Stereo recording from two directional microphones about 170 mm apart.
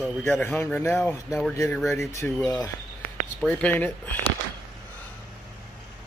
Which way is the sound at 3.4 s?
5° left (ahead or behind).